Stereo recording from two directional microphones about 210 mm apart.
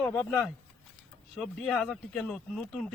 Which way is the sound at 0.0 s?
10° left (ahead or behind).